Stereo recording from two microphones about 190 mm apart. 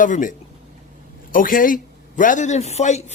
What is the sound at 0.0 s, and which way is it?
A man's voice, 45° left (ahead or behind).